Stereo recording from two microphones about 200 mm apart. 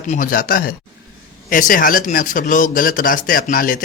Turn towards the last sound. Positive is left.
turn(degrees=45)  # may be behind; listen again after turning